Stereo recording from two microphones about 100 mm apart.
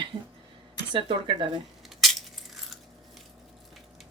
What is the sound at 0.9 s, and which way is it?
Speech, 60° right (ahead or behind).